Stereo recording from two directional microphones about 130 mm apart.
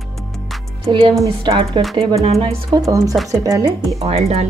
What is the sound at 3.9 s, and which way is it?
Speech, 50° right (ahead or behind).